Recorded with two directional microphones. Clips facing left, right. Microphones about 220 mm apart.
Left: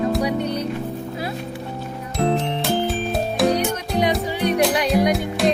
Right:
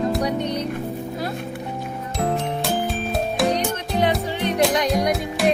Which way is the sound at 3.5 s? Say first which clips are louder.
Left 2 dB; 10° left (ahead or behind).